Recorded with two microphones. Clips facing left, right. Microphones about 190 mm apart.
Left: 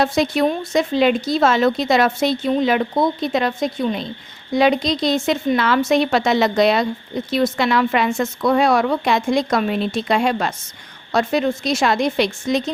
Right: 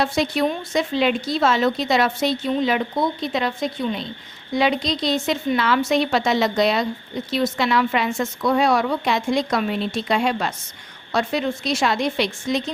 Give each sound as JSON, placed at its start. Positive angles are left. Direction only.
{"t": 0.0, "sound": "a woman's voice", "side_deg": 45}